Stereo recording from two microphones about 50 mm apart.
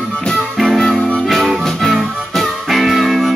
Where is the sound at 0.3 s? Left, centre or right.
Centre.